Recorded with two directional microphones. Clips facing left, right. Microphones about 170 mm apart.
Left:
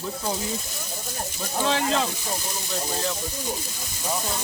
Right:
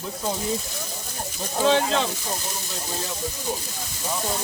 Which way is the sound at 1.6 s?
Centre (ahead or behind).